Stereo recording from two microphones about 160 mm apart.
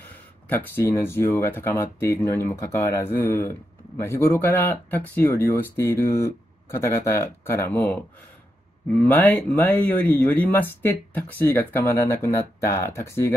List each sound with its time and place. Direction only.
0.0 s speech: 10° left (ahead or behind)
8.9 s speech: 10° left (ahead or behind)